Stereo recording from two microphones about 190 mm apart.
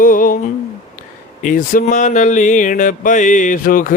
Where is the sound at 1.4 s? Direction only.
45° left (ahead or behind).